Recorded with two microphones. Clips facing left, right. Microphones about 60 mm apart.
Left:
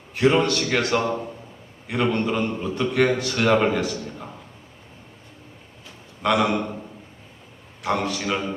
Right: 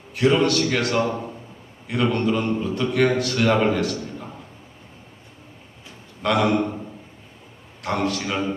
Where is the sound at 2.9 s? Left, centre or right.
Left.